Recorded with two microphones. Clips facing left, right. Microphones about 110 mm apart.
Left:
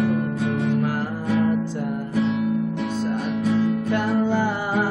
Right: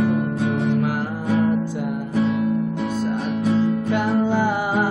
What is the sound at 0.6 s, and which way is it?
Music, 15° right (ahead or behind).